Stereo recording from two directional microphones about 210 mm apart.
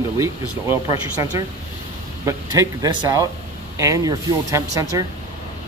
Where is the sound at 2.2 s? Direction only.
15° right (ahead or behind).